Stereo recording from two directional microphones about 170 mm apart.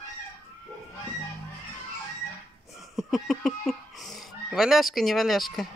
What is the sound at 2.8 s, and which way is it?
Speech, centre (ahead or behind).